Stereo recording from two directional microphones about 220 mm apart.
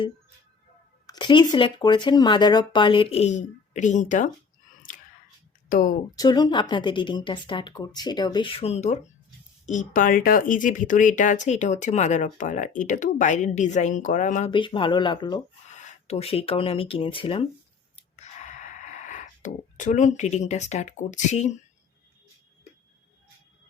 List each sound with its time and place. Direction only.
1.0 s speech: 20° left (ahead or behind)
5.6 s speech: 40° left (ahead or behind)
6.1 s speech: 20° left (ahead or behind); by 14.5 s 35° left (ahead or behind)
14.5 s speech: 20° left (ahead or behind)
15.7 s speech: 35° left (ahead or behind)
17.9 s a sound: 30° left (ahead or behind)